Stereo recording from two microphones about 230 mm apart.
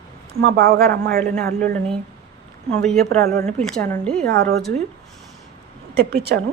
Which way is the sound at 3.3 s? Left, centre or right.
Centre.